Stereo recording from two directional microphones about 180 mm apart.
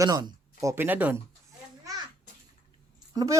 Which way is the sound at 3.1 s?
20° right (ahead or behind).